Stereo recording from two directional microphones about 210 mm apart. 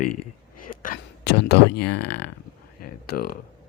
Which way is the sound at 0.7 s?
40° left (ahead or behind).